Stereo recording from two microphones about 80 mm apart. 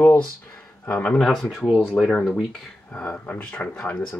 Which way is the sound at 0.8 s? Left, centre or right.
Left.